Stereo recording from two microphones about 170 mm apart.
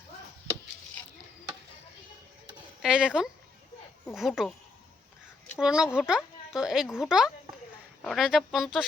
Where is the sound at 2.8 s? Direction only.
5° right (ahead or behind).